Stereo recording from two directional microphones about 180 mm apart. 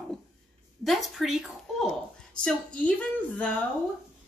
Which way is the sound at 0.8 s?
Centre (ahead or behind).